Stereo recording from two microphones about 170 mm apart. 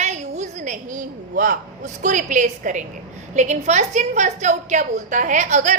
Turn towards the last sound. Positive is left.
turn(degrees=-45)  # may be behind; listen again after turning